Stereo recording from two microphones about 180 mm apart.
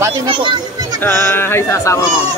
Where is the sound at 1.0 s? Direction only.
15° left (ahead or behind).